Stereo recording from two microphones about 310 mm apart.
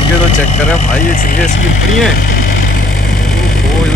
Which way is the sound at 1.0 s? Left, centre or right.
Left.